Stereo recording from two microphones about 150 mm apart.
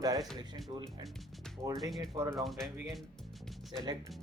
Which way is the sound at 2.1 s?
20° right (ahead or behind).